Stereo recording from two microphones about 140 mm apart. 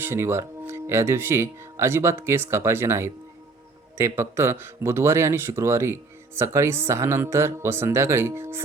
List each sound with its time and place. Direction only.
0.0 s a man's voice: 15° right (ahead or behind)